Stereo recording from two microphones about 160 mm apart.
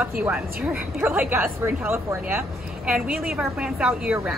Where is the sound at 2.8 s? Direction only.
5° right (ahead or behind).